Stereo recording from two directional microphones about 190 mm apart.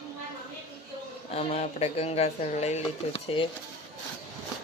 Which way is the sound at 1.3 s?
30° left (ahead or behind).